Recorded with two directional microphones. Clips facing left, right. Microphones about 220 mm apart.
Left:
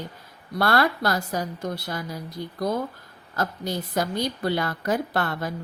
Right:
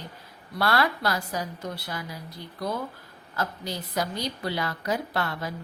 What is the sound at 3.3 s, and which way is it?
A woman's voice, 50° left (ahead or behind).